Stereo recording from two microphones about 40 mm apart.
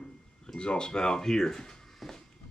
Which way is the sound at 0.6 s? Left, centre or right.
Left.